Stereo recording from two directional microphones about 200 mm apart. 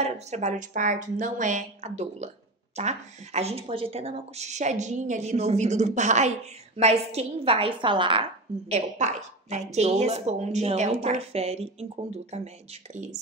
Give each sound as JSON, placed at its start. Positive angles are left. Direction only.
{"t": 0.0, "sound": "speech", "side_deg": -35}